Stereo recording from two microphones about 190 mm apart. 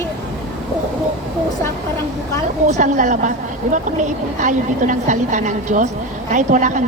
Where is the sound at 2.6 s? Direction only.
40° right (ahead or behind).